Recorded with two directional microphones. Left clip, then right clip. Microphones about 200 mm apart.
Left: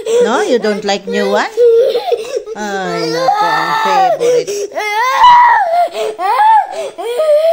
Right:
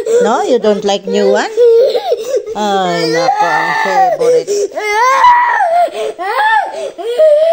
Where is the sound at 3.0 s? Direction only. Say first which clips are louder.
Right 1 dB; 5° left (ahead or behind); by 6.6 s 20° left (ahead or behind).